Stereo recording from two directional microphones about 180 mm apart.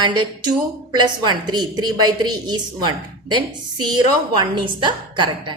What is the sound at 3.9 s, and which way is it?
Speech, 25° right (ahead or behind).